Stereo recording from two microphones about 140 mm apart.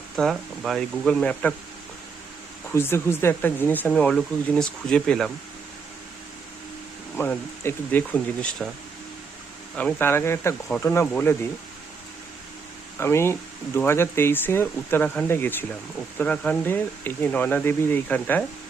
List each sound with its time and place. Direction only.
0.2 s speech: centre (ahead or behind)
2.7 s speech: 15° left (ahead or behind)
7.2 s speech: 15° left (ahead or behind)
9.7 s speech: 15° left (ahead or behind)
13.0 s speech: 20° left (ahead or behind)